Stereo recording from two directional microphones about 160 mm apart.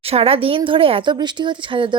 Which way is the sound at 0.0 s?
40° right (ahead or behind).